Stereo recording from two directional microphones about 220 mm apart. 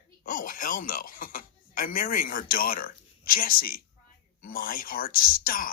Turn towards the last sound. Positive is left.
turn(degrees=40)  # may be behind; listen again after turning